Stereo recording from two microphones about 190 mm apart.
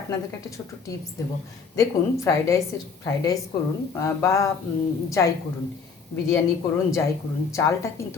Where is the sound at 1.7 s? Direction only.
15° left (ahead or behind).